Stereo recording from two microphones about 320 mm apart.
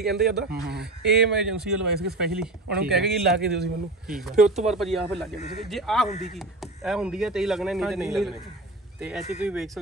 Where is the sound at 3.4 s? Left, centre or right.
Right.